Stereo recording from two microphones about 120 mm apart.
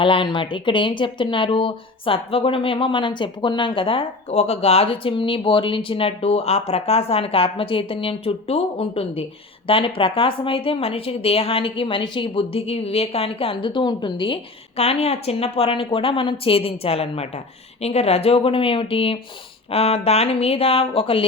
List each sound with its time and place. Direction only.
0.0 s speech: 45° left (ahead or behind)
14.8 s speech: 60° left (ahead or behind)